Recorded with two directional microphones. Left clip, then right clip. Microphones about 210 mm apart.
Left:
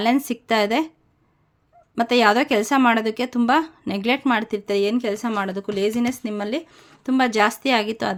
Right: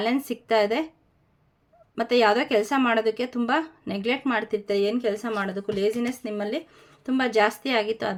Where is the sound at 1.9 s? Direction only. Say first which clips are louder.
Left 3 dB; 35° left (ahead or behind).